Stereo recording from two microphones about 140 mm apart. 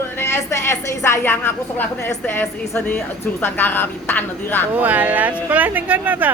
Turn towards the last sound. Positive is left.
turn(degrees=-10)  # may be behind; listen again after turning